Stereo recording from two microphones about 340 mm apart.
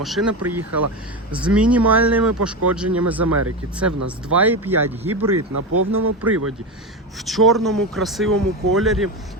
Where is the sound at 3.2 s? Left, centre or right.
Right.